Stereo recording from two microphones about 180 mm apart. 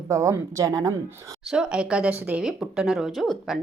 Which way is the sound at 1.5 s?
5° right (ahead or behind).